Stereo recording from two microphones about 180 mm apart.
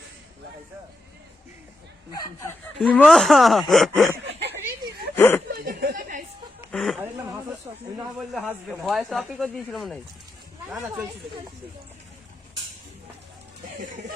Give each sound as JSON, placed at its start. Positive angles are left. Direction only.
{"t": 2.1, "sound": "speech", "side_deg": 20}
{"t": 2.8, "sound": "speech", "side_deg": 5}
{"t": 4.2, "sound": "a sound", "side_deg": -75}
{"t": 5.1, "sound": "speech", "side_deg": 10}
{"t": 5.5, "sound": "a sound", "side_deg": -60}
{"t": 6.7, "sound": "chicken", "side_deg": 0}
{"t": 7.9, "sound": "speech", "side_deg": -5}
{"t": 13.7, "sound": "speech", "side_deg": -45}